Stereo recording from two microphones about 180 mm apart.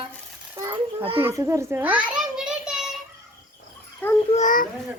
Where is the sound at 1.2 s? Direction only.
15° right (ahead or behind).